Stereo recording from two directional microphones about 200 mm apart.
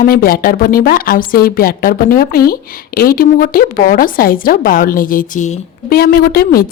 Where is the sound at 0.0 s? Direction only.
45° left (ahead or behind).